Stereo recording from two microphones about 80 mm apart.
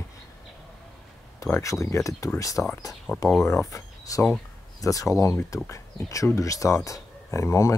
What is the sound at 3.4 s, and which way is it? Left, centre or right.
Speech, left.